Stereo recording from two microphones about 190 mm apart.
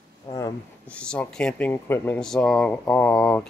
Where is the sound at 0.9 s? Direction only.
5° left (ahead or behind).